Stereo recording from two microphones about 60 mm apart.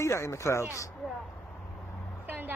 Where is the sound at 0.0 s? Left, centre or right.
Left.